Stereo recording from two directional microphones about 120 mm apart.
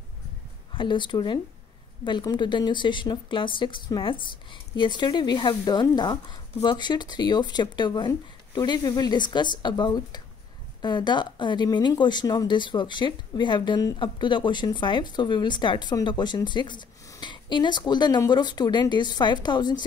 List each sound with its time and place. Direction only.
0.7 s a woman's voice: 40° left (ahead or behind)